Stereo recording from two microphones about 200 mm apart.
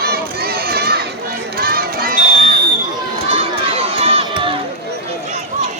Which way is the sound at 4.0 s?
25° right (ahead or behind).